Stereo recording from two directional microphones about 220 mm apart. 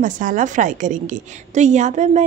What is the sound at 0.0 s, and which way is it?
A woman's voice, 35° right (ahead or behind).